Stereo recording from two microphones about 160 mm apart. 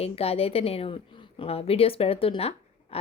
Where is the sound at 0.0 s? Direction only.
40° left (ahead or behind).